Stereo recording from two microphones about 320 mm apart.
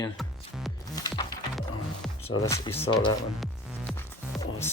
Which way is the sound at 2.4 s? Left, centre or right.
Centre.